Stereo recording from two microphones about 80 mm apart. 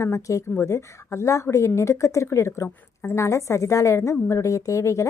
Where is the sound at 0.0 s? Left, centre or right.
Left.